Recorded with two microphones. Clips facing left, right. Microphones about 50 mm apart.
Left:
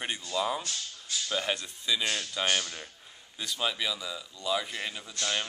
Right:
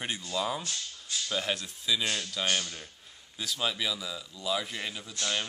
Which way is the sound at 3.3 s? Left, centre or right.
Centre.